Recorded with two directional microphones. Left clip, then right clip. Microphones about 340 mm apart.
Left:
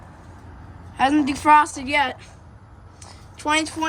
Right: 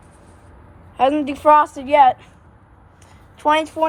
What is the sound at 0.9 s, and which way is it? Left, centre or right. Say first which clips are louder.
A woman's voice: right 2 dB; centre.